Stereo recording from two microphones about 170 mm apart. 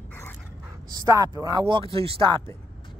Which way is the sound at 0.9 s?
20° right (ahead or behind).